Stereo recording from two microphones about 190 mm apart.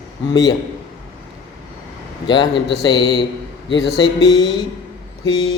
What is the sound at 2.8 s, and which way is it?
A man's voice, 25° left (ahead or behind).